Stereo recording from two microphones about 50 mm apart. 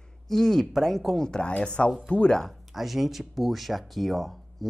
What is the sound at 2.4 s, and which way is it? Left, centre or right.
Speech, centre.